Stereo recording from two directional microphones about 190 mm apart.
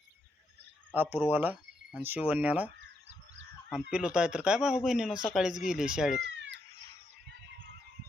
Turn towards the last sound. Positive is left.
turn(degrees=-70)  # may be behind; listen again after turning